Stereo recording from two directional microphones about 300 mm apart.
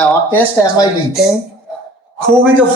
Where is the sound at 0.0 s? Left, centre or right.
Centre.